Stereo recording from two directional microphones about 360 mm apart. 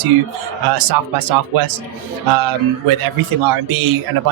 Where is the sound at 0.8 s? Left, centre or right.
Right.